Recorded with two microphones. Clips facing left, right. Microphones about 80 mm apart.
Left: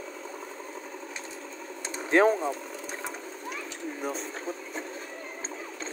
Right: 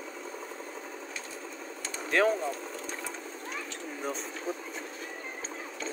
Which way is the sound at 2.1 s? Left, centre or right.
Left.